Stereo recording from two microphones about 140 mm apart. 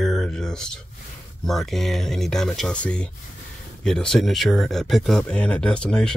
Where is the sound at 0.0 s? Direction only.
5° left (ahead or behind).